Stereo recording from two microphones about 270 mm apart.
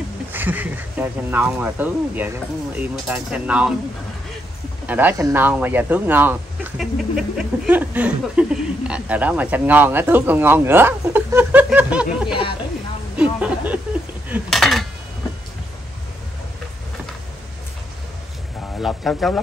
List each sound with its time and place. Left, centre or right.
0.3 s speech: centre
4.8 s speech: centre
13.2 s a sound: centre
14.3 s speech: centre
18.8 s speech: centre